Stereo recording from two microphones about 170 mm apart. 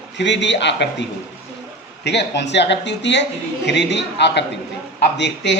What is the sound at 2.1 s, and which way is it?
A woman's voice, 90° left.